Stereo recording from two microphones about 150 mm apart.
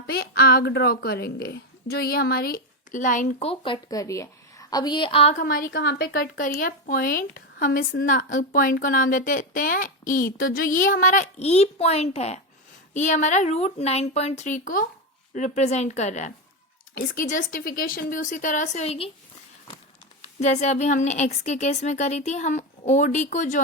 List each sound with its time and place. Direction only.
0.1 s a woman's voice: 90° left; by 3.4 s 60° left (ahead or behind)
3.4 s a woman's voice: 35° left (ahead or behind)
5.4 s a woman's voice: 65° left (ahead or behind)
15.3 s a woman's voice: 55° left (ahead or behind)
16.9 s a woman's voice: 70° left (ahead or behind); by 19.1 s 40° left (ahead or behind)
20.4 s a woman's voice: 50° left (ahead or behind)